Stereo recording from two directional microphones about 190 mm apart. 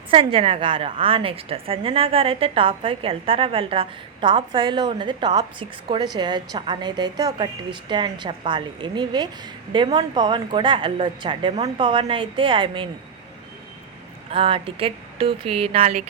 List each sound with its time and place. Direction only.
0.1 s a woman's voice: 30° right (ahead or behind)
14.3 s a woman's voice: 30° right (ahead or behind)